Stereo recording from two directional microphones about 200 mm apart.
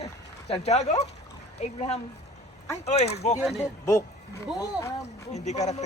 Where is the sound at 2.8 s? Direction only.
30° left (ahead or behind).